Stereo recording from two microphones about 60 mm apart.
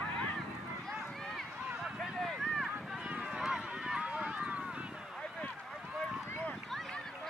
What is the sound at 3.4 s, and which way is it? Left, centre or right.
Run, centre.